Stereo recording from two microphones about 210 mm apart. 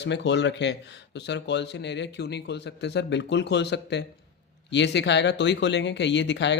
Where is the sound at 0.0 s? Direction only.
55° left (ahead or behind).